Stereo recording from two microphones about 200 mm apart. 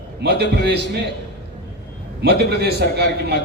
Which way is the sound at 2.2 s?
55° right (ahead or behind).